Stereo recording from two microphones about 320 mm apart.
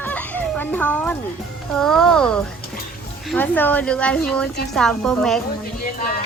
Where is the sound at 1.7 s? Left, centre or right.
Centre.